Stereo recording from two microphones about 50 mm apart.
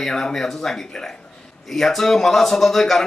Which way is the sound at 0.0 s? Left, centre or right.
Centre.